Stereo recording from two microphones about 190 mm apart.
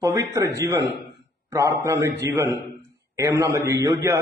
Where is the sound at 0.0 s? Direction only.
15° right (ahead or behind).